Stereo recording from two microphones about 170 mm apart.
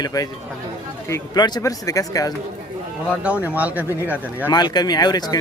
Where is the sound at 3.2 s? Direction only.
10° right (ahead or behind).